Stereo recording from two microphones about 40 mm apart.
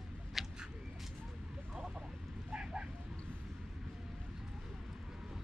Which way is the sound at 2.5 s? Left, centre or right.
Right.